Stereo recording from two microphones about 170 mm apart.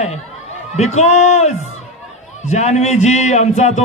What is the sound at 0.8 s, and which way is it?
A man's voice, 40° left (ahead or behind).